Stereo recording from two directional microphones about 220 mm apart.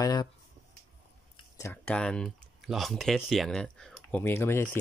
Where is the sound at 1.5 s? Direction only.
10° left (ahead or behind).